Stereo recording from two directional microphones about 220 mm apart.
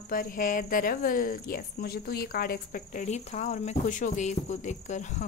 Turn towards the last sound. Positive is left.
turn(degrees=35)  # may be behind; listen again after turning